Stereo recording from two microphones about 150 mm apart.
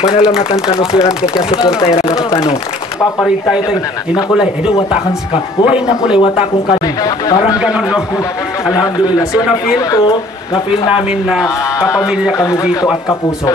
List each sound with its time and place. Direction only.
0.1 s speech: 35° left (ahead or behind)
3.2 s speech: centre (ahead or behind)
5.3 s speech: 35° left (ahead or behind)
7.5 s a man's voice: 5° right (ahead or behind)
10.5 s speech: 35° left (ahead or behind)